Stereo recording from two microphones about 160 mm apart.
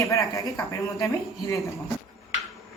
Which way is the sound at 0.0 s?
20° left (ahead or behind).